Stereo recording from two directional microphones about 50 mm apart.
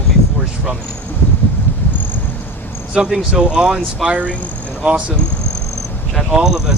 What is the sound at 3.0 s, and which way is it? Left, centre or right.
Speech, centre.